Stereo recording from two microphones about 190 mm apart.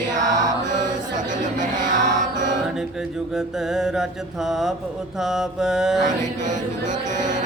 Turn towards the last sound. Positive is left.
turn(degrees=-40)  # may be behind; listen again after turning